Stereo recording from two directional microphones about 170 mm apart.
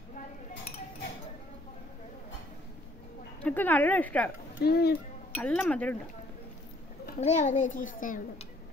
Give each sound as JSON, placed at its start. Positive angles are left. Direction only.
{"t": 3.4, "sound": "a woman's voice", "side_deg": 10}
{"t": 4.6, "sound": "speech", "side_deg": 70}
{"t": 5.4, "sound": "a woman's voice", "side_deg": 5}
{"t": 7.2, "sound": "a child's voice", "side_deg": 45}